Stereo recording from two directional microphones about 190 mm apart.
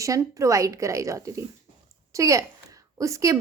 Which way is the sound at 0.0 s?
15° right (ahead or behind).